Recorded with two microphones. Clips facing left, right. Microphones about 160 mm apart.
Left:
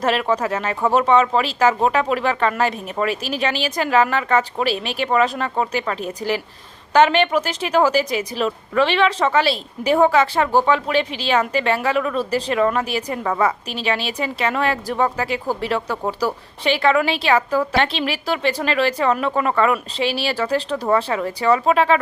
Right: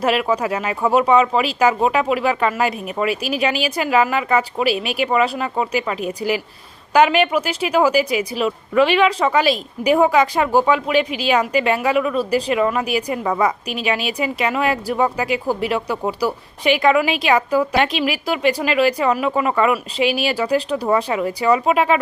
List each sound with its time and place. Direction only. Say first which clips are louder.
0.0 s speech: right 1 dB; 10° right (ahead or behind)